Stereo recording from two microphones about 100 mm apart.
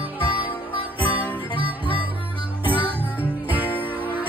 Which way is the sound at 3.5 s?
20° right (ahead or behind).